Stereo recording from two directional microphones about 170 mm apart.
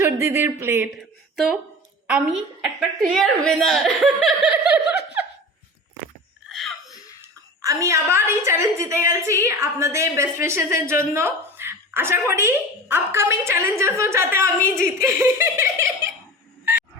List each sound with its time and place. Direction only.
0.0 s a woman's voice: 15° right (ahead or behind)
2.0 s speech: 5° right (ahead or behind)
6.5 s a sound: centre (ahead or behind)
7.2 s a woman's voice: 20° right (ahead or behind)